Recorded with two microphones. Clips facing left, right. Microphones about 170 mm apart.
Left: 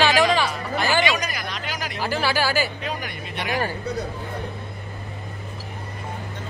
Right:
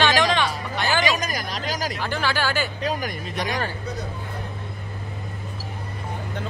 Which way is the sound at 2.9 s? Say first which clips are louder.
Right 4 dB; 40° right (ahead or behind).